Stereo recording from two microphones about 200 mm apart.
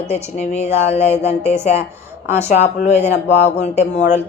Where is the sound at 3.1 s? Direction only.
60° left (ahead or behind).